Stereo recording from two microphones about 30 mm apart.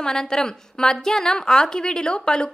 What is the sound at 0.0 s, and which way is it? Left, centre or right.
A woman's voice, centre.